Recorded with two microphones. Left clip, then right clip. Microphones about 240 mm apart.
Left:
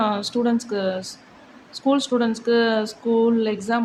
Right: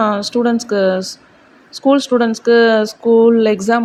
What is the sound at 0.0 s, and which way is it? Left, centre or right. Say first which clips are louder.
Speech: right 7 dB; right.